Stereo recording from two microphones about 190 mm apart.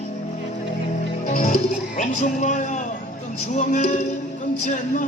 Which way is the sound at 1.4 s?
40° left (ahead or behind).